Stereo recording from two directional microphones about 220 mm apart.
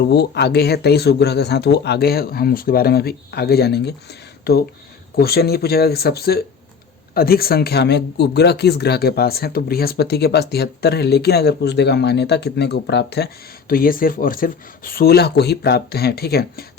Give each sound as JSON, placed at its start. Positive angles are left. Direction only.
{"t": 0.0, "sound": "speech", "side_deg": 50}